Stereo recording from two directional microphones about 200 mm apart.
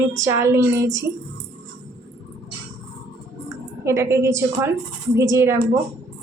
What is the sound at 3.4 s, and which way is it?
A woman's voice, 15° right (ahead or behind).